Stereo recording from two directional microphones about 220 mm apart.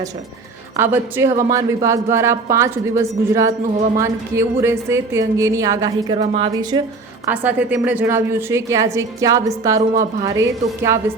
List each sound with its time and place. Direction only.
0.8 s a woman's voice: 10° right (ahead or behind)
6.1 s speech: 25° right (ahead or behind)
7.3 s a woman's voice: 5° right (ahead or behind)